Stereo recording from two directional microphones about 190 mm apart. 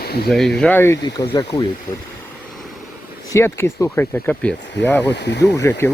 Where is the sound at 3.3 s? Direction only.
15° left (ahead or behind).